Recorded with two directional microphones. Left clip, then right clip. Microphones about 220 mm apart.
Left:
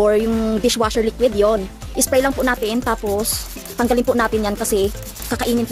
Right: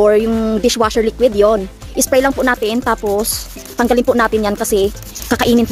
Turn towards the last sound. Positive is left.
turn(degrees=-45)  # may be behind; listen again after turning